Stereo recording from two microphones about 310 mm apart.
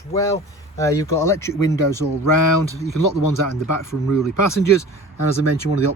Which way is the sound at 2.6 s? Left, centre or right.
Left.